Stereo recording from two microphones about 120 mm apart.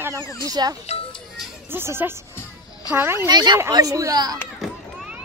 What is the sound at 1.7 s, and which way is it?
Speech, 20° right (ahead or behind).